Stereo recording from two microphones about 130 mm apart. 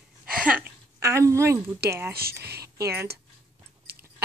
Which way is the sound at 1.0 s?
20° right (ahead or behind).